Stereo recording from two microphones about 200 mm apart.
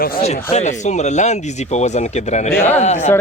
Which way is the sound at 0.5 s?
35° left (ahead or behind).